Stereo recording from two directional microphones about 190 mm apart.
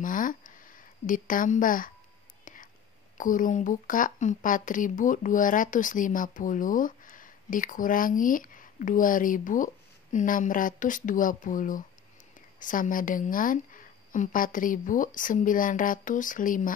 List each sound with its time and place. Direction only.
0.0 s a sound: 45° left (ahead or behind)
2.4 s whispering: 45° left (ahead or behind)
3.2 s speech: 45° left (ahead or behind)